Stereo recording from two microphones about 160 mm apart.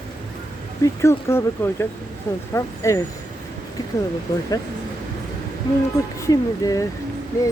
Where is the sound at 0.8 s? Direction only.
15° left (ahead or behind).